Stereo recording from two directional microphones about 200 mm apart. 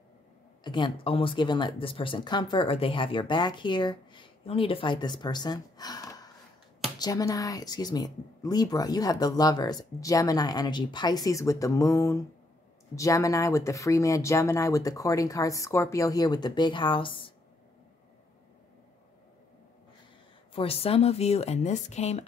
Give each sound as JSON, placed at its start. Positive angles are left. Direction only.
{"t": 0.7, "sound": "speech", "side_deg": 25}
{"t": 20.5, "sound": "speech", "side_deg": 30}